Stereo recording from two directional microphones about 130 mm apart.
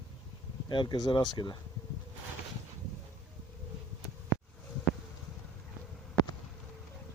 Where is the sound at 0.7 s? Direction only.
35° left (ahead or behind).